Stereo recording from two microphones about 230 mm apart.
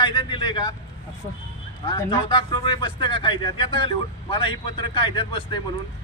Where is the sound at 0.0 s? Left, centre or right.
Left.